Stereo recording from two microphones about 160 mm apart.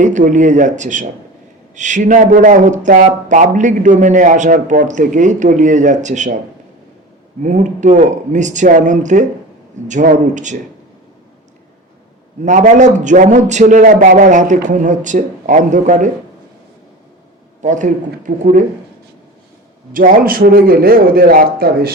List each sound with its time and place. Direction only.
0.0 s a man's voice: 50° right (ahead or behind)
7.4 s a man's voice: 50° right (ahead or behind)
12.5 s a man's voice: 50° right (ahead or behind)
17.6 s a man's voice: 50° right (ahead or behind)
19.9 s a man's voice: 60° right (ahead or behind)